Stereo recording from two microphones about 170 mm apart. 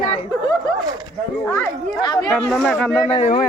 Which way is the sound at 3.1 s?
40° left (ahead or behind).